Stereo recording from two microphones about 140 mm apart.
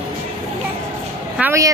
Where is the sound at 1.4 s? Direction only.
20° right (ahead or behind).